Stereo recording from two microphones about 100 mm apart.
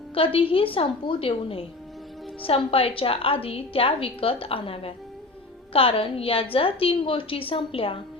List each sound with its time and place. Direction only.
0.1 s a woman's voice: 65° left (ahead or behind)